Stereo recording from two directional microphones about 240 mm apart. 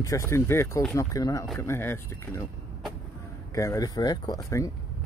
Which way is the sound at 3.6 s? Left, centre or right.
Centre.